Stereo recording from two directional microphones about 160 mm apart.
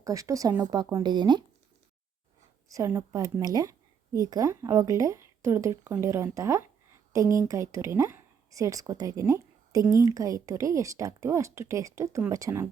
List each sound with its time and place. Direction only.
0.0 s a woman's voice: 20° right (ahead or behind)
2.7 s a woman's voice: 20° right (ahead or behind)